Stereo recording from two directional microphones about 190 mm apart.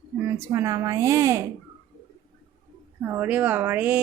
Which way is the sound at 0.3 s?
15° right (ahead or behind).